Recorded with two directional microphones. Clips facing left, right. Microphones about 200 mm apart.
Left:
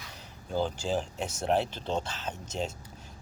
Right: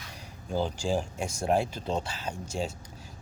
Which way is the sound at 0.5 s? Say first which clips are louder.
Right 1 dB; 10° right (ahead or behind).